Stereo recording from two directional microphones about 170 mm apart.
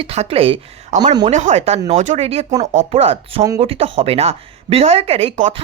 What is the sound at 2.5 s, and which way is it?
Speech, 20° right (ahead or behind).